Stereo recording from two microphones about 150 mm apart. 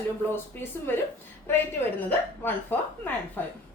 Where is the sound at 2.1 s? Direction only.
10° left (ahead or behind).